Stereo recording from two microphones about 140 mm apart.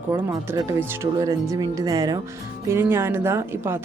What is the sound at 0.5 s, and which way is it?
Speech, 25° right (ahead or behind).